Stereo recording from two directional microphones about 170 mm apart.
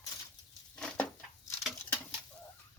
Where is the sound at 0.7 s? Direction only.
5° left (ahead or behind).